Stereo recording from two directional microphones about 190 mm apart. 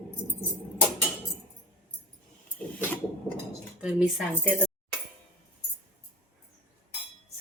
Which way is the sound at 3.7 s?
10° right (ahead or behind).